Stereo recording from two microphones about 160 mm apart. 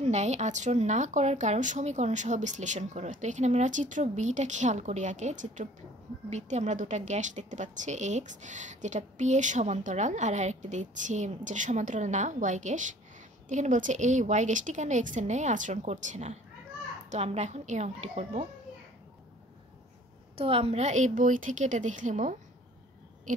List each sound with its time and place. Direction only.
0.0 s a woman's voice: 45° right (ahead or behind)
20.3 s a woman's voice: 35° right (ahead or behind)